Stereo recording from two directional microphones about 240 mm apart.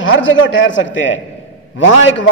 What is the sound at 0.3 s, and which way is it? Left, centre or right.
A man's voice, left.